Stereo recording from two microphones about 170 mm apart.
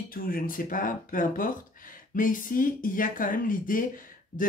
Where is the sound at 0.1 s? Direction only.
55° left (ahead or behind).